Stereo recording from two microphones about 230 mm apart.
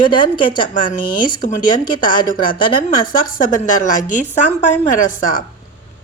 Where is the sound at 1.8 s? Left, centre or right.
Left.